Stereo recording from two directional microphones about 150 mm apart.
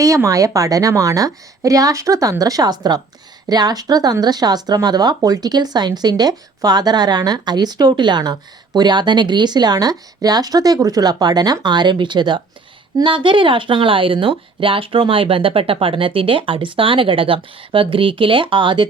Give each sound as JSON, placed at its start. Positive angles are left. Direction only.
{"t": 0.0, "sound": "speech", "side_deg": -20}